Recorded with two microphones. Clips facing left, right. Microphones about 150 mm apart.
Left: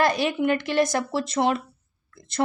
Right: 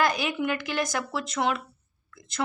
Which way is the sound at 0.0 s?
30° left (ahead or behind).